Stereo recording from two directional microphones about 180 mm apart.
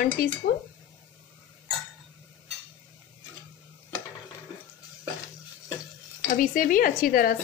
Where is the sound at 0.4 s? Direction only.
55° left (ahead or behind).